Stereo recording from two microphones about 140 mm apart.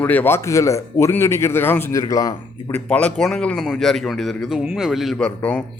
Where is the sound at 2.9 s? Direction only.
10° left (ahead or behind).